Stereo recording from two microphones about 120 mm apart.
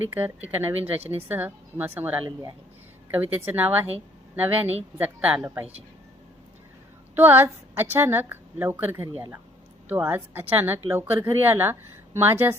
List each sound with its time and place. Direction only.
0.1 s a woman's voice: 15° right (ahead or behind)
7.2 s speech: 20° right (ahead or behind)